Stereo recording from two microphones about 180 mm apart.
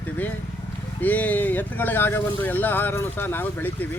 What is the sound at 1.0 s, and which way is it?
Speech, 10° left (ahead or behind).